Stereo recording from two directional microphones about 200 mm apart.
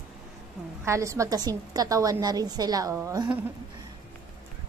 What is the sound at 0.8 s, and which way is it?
A woman's voice, 15° right (ahead or behind).